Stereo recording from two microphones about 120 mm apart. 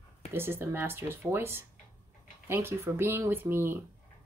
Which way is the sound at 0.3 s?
20° right (ahead or behind).